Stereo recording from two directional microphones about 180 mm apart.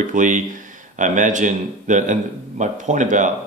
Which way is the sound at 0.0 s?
45° right (ahead or behind).